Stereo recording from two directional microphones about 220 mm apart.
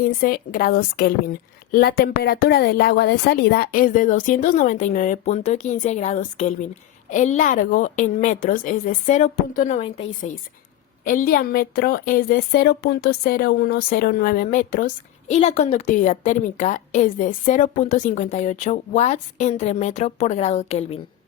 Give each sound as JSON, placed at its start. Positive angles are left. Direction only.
{"t": 0.0, "sound": "a woman's voice", "side_deg": 40}